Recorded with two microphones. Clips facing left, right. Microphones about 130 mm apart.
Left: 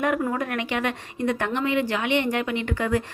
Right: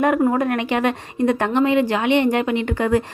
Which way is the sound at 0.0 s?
35° right (ahead or behind).